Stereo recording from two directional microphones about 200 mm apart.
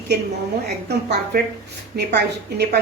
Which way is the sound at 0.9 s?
55° right (ahead or behind).